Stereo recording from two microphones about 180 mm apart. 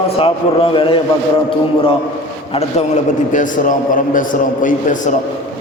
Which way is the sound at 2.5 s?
35° left (ahead or behind).